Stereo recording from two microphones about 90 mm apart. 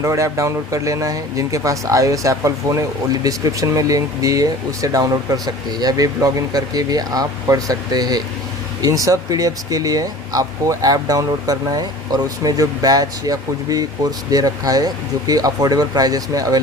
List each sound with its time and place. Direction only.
0.0 s speech: 35° right (ahead or behind)